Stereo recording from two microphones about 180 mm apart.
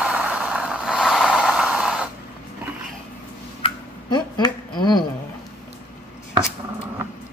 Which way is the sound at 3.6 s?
25° left (ahead or behind).